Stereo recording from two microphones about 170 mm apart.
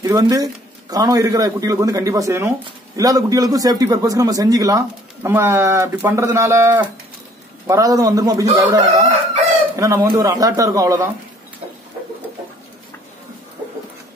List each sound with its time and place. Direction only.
0.0 s a man's voice: 20° right (ahead or behind)